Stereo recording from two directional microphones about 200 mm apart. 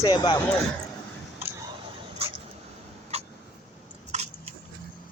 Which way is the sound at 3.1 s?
30° right (ahead or behind).